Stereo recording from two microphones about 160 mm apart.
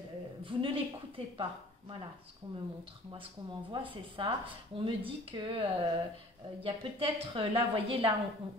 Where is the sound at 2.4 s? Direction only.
30° right (ahead or behind).